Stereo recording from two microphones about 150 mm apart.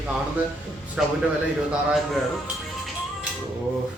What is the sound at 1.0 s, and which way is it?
Speech, 5° right (ahead or behind).